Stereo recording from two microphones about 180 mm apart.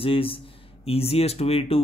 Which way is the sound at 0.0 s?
30° left (ahead or behind).